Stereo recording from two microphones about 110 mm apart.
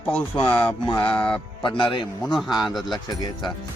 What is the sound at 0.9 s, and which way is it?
Speech, 45° left (ahead or behind).